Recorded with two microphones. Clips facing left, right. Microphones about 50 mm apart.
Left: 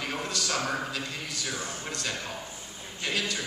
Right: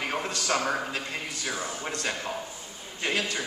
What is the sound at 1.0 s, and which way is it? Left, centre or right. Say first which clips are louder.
A man's voice: right 2 dB; right.